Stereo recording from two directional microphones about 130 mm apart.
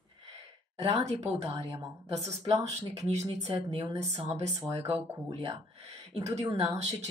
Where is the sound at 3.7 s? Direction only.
35° right (ahead or behind).